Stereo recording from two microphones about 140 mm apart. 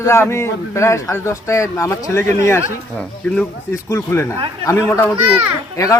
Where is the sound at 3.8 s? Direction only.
20° left (ahead or behind).